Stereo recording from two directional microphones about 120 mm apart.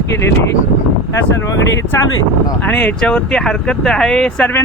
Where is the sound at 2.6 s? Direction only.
10° left (ahead or behind).